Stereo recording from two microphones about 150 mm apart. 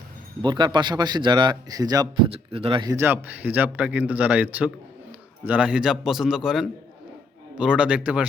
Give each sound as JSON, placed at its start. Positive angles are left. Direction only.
{"t": 0.4, "sound": "speech", "side_deg": -30}
{"t": 2.3, "sound": "speech", "side_deg": -40}
{"t": 2.9, "sound": "a man's voice", "side_deg": -15}